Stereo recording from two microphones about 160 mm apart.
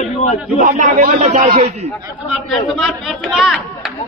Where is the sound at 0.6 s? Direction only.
55° right (ahead or behind).